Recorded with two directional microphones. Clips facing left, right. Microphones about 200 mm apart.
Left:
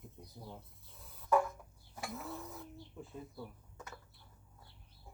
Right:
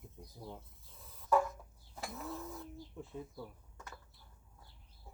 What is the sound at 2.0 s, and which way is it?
Speech, centre (ahead or behind).